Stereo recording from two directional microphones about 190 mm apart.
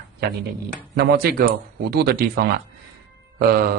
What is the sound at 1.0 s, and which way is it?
Speech, 55° right (ahead or behind).